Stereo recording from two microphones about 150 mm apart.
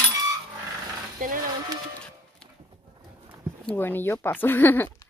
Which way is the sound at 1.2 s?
65° right (ahead or behind).